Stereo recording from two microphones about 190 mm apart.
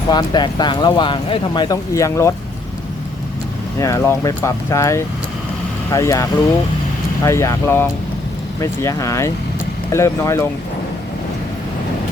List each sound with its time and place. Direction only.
0.1 s speech: 20° left (ahead or behind)
3.8 s speech: 15° left (ahead or behind)
7.3 s speech: 15° left (ahead or behind)